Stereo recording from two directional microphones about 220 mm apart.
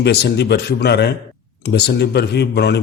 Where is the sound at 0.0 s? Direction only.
50° left (ahead or behind).